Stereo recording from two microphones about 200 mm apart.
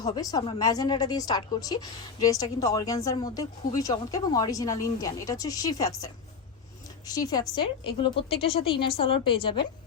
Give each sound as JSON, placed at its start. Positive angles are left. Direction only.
{"t": 0.0, "sound": "a woman's voice", "side_deg": 20}
{"t": 7.1, "sound": "a woman's voice", "side_deg": 20}